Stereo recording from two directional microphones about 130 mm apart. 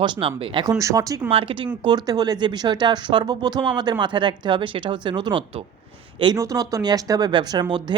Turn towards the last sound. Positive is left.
turn(degrees=-35)  # may be behind; listen again after turning